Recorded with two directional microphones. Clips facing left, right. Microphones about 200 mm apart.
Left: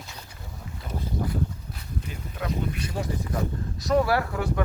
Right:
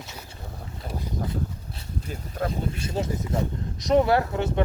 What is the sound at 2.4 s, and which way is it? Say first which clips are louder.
Speech: right 3 dB; 45° right (ahead or behind).